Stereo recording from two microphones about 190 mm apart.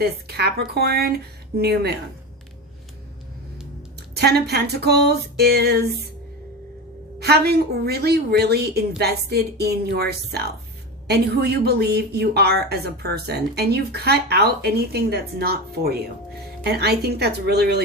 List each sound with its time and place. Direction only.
0.0 s a woman's voice: 60° right (ahead or behind)
4.1 s a woman's voice: 55° right (ahead or behind)
7.2 s a woman's voice: 60° right (ahead or behind)